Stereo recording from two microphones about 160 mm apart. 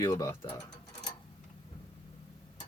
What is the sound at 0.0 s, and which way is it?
Speech, 20° left (ahead or behind).